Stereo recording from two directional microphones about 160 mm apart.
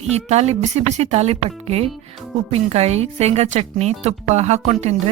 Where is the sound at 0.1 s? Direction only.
40° right (ahead or behind).